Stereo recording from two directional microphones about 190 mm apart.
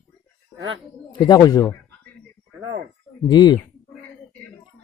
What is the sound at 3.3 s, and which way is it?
Speech, 20° left (ahead or behind).